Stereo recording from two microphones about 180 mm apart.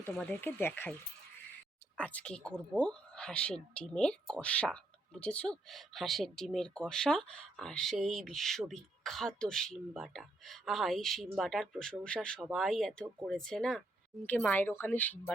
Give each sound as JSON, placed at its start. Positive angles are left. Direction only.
{"t": 0.2, "sound": "speech", "side_deg": 10}
{"t": 2.0, "sound": "speech", "side_deg": 5}